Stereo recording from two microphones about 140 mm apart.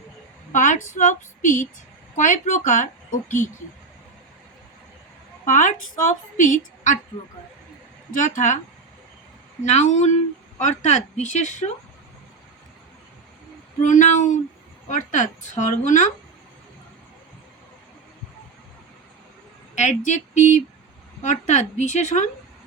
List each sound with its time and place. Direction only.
0.5 s a woman's voice: 65° left (ahead or behind)
5.5 s a woman's voice: 65° left (ahead or behind)
8.2 s a woman's voice: 65° left (ahead or behind)
9.6 s a woman's voice: 55° left (ahead or behind)
13.8 s a woman's voice: 60° left (ahead or behind)
19.7 s a woman's voice: 60° left (ahead or behind)